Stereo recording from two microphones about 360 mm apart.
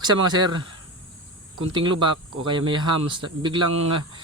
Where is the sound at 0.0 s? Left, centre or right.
Centre.